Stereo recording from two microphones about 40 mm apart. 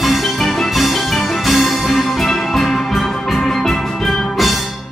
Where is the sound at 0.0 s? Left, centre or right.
Centre.